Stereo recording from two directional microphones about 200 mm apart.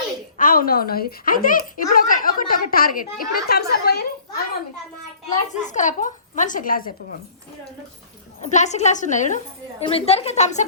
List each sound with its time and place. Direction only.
0.3 s speech: 45° left (ahead or behind)
5.5 s a woman's voice: 35° left (ahead or behind)
8.4 s a woman's voice: 35° left (ahead or behind)